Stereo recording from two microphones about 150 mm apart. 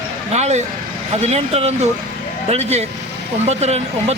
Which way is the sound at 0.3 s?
50° right (ahead or behind).